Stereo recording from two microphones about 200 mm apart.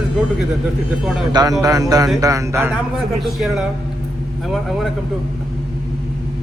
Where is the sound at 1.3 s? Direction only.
20° right (ahead or behind).